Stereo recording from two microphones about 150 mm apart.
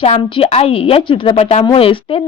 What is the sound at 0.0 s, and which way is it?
A woman's voice, 40° left (ahead or behind).